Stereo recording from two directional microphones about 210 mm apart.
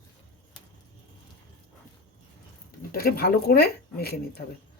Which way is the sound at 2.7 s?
45° left (ahead or behind).